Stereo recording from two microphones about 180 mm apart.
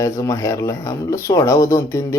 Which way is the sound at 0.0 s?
15° left (ahead or behind).